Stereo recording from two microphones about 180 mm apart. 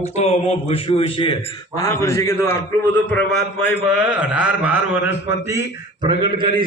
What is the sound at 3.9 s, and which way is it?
A man's voice, 5° right (ahead or behind).